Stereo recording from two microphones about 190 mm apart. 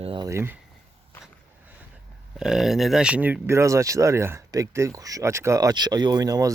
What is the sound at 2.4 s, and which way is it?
Speech, centre (ahead or behind).